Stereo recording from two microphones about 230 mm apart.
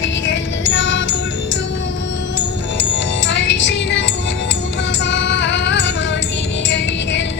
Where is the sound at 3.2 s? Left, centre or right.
Left.